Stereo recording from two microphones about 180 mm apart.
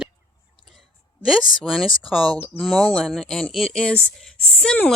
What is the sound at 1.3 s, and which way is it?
Speech, centre (ahead or behind).